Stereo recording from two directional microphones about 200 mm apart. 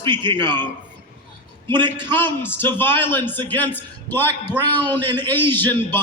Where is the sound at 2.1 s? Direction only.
10° left (ahead or behind).